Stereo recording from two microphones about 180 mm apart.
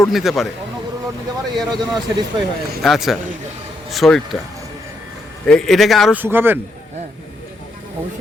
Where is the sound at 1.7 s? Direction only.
25° right (ahead or behind).